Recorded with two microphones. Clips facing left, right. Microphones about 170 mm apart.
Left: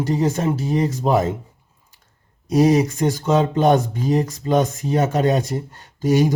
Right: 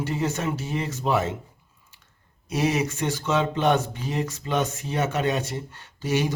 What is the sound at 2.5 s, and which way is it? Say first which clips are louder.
Speech: left 9 dB; 40° left (ahead or behind).